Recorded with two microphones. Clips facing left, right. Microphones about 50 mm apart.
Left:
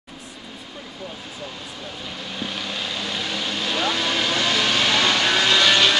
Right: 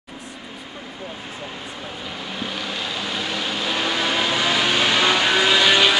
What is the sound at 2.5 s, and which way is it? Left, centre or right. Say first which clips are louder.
Vehicle: right 1 dB; centre.